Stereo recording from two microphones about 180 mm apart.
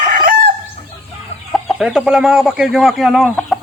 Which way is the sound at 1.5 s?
Centre (ahead or behind).